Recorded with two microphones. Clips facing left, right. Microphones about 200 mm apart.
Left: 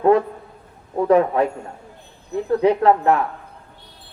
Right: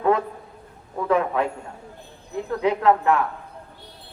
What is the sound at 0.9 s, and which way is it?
Speech, 35° left (ahead or behind).